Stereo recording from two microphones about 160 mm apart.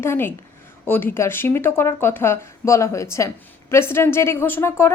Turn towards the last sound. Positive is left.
turn(degrees=15)  # may be behind; listen again after turning